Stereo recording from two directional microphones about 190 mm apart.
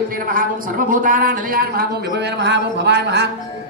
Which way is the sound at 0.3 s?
45° right (ahead or behind).